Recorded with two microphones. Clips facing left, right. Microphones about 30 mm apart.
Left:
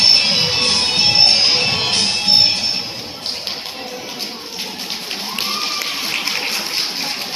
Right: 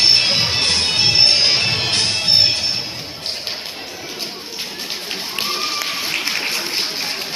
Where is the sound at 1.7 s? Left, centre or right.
Left.